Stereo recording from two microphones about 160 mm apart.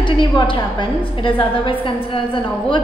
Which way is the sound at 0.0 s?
30° left (ahead or behind).